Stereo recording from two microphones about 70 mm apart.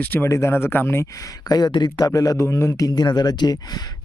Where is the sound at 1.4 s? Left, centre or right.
Left.